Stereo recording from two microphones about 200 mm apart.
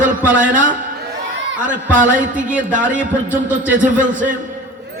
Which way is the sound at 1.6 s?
40° right (ahead or behind).